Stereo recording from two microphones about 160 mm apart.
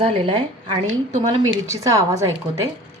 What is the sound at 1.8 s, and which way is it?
Speech, 20° right (ahead or behind).